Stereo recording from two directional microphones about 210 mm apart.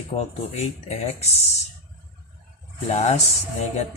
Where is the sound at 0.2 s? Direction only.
30° left (ahead or behind).